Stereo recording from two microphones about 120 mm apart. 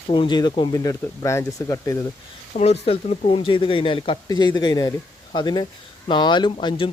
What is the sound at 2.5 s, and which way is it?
Speech, 60° left (ahead or behind).